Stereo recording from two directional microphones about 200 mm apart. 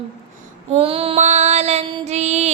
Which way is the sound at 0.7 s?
30° right (ahead or behind).